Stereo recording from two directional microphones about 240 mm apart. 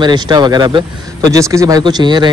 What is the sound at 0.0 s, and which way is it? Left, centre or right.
A man's voice, centre.